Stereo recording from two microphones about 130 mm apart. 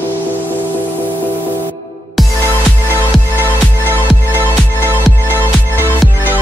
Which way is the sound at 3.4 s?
15° right (ahead or behind).